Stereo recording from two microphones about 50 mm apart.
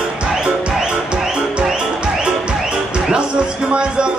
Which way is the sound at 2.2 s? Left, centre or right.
Centre.